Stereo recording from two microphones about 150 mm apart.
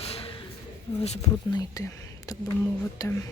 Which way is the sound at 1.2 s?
25° left (ahead or behind).